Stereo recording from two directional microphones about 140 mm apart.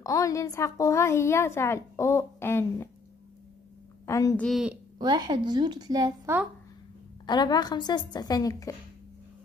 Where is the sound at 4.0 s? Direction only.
20° left (ahead or behind).